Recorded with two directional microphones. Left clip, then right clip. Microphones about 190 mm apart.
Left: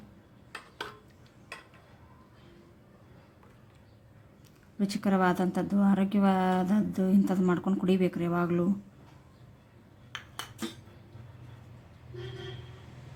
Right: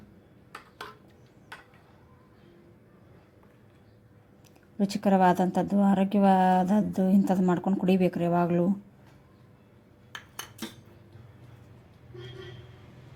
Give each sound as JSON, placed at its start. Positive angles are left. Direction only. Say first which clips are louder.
{"t": 4.8, "sound": "a woman's voice", "louder": "right 5 dB", "side_deg": -15}